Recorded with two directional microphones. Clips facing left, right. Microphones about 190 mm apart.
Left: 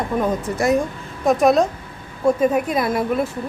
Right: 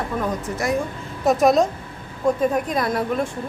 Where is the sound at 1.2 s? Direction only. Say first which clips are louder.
Left 1 dB; centre (ahead or behind).